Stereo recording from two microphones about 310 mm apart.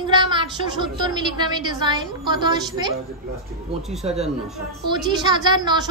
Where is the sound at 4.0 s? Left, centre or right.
Centre.